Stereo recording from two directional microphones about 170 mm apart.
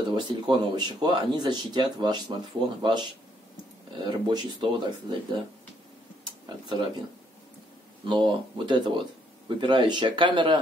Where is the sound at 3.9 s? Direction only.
25° right (ahead or behind).